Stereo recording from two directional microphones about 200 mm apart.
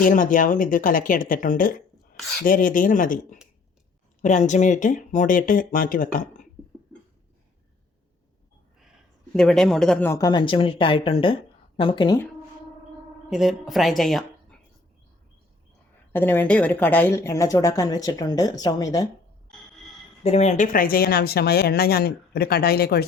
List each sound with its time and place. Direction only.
0.0 s speech: 40° left (ahead or behind)
9.3 s speech: centre (ahead or behind); by 12.2 s 20° left (ahead or behind)
13.3 s speech: centre (ahead or behind)
16.1 s speech: 10° left (ahead or behind)
20.2 s speech: 30° left (ahead or behind); by 23.0 s 50° left (ahead or behind)